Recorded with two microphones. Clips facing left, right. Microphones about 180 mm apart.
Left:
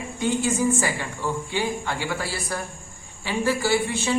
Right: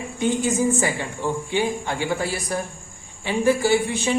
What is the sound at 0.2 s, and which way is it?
A man's voice, 20° right (ahead or behind).